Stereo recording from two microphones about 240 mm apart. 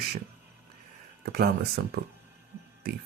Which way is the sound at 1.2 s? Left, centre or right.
Right.